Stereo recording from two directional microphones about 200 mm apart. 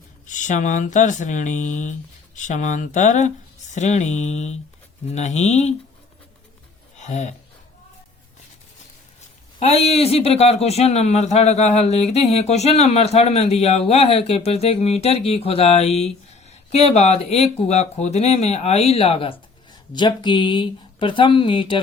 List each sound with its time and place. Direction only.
0.3 s speech: 40° left (ahead or behind)
7.0 s speech: 35° left (ahead or behind)
9.6 s speech: 30° left (ahead or behind)